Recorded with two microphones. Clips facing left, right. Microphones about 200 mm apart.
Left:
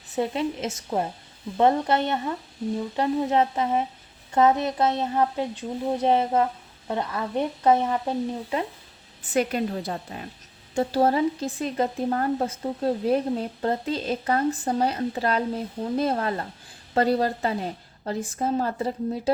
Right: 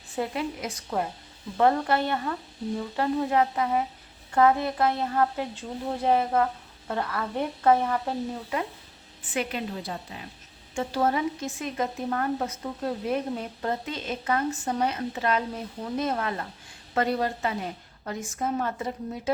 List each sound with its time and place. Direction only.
0.2 s a woman's voice: 25° left (ahead or behind)
9.2 s a woman's voice: 40° left (ahead or behind)
10.8 s speech: 35° left (ahead or behind)